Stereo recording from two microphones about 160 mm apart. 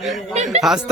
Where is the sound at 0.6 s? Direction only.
5° right (ahead or behind).